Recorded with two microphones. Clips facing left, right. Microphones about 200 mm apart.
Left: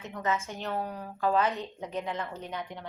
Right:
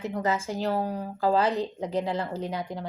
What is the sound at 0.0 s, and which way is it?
A woman's voice, 35° right (ahead or behind).